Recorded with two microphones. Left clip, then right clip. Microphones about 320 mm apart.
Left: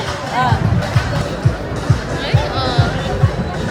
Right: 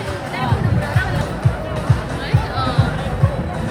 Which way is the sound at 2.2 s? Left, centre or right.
Centre.